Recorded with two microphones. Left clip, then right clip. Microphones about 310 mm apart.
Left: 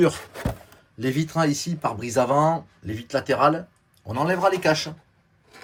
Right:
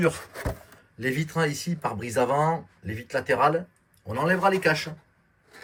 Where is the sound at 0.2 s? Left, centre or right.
Centre.